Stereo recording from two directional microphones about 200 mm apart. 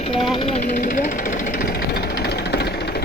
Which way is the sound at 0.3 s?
30° left (ahead or behind).